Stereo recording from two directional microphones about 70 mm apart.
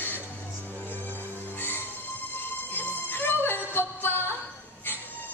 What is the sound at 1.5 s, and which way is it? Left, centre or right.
Music, left.